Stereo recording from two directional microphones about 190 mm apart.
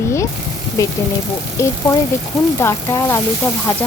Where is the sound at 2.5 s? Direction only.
15° left (ahead or behind).